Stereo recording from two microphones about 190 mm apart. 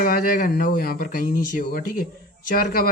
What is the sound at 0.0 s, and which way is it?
Speech, 45° left (ahead or behind).